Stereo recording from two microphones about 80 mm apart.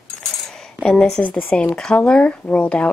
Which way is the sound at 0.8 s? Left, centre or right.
Centre.